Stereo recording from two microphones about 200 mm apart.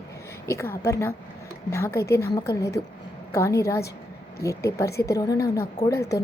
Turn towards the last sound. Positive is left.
turn(degrees=15)  # may be behind; listen again after turning